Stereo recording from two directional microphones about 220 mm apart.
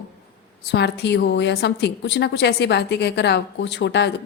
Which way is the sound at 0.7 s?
50° left (ahead or behind).